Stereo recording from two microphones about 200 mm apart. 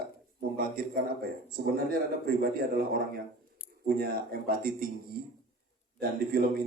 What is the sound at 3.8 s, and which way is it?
A man's voice, 50° right (ahead or behind).